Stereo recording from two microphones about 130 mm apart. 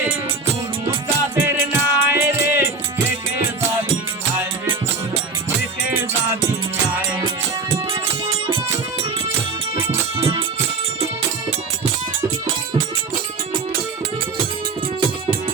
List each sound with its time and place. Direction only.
1.0 s music: 20° right (ahead or behind)
9.7 s music: 20° right (ahead or behind)
10.2 s music: 45° right (ahead or behind)